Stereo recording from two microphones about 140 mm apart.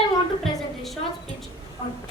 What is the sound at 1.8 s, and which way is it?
Speech, 45° left (ahead or behind).